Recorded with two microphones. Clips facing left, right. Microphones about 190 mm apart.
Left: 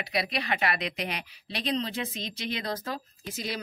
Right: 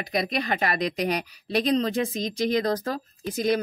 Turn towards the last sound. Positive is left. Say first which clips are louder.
# right 11 dB
turn(degrees=-50)  # may be behind; listen again after turning